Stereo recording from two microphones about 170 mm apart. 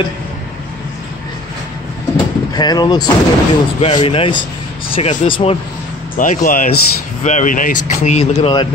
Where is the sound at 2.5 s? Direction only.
25° left (ahead or behind).